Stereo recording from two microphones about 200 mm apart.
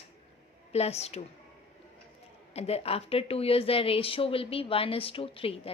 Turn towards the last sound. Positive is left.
turn(degrees=30)  # may be behind; listen again after turning